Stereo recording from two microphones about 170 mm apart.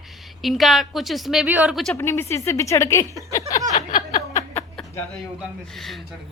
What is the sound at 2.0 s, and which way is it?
Speech, 15° left (ahead or behind).